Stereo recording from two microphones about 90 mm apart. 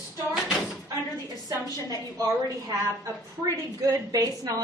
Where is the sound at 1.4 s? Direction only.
40° right (ahead or behind).